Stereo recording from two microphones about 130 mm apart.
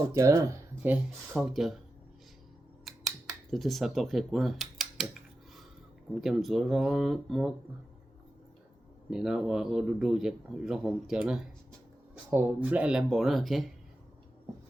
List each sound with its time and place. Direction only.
0.1 s speech: 25° right (ahead or behind)
1.3 s speech: centre (ahead or behind)
2.8 s camera: centre (ahead or behind)
6.1 s speech: centre (ahead or behind)
9.0 s speech: 5° right (ahead or behind)